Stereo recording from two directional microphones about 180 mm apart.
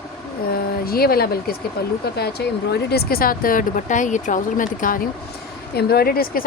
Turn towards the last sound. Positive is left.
turn(degrees=55)  # may be behind; listen again after turning